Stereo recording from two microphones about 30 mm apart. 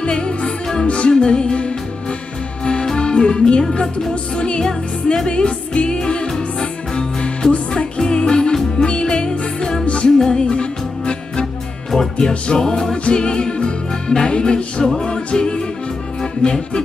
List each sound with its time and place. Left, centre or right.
0.1 s music: left
4.1 s music: left
4.6 s music: left
9.8 s music: left
10.1 s music: centre
10.4 s music: left
12.9 s music: left